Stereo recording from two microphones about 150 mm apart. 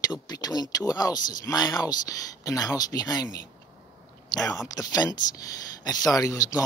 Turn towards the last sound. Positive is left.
turn(degrees=25)  # may be behind; listen again after turning